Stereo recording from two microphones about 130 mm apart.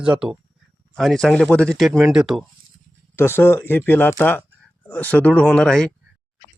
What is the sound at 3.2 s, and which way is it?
Speech, 20° left (ahead or behind).